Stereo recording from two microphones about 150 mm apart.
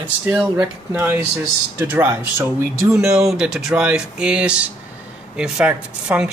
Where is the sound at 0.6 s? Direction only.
10° right (ahead or behind).